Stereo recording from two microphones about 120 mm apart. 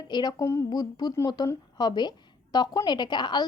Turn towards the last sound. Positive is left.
turn(degrees=40)  # may be behind; listen again after turning